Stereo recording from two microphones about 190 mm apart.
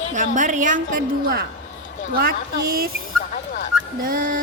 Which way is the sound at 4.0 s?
45° right (ahead or behind).